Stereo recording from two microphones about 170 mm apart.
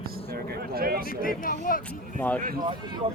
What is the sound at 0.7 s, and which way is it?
Speech, 60° right (ahead or behind).